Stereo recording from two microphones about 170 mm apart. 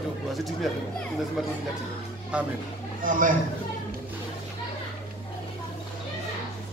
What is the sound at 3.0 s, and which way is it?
Speech, 50° right (ahead or behind).